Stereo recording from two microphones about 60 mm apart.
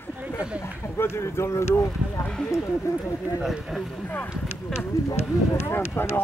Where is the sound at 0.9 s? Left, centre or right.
Left.